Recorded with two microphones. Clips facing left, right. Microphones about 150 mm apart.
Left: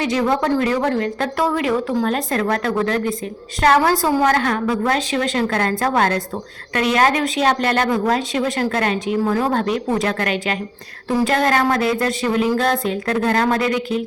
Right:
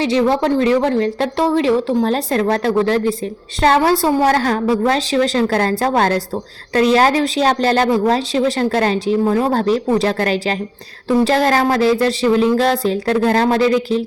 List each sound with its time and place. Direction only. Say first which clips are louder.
0.0 s a woman's voice: right 4 dB; 30° right (ahead or behind)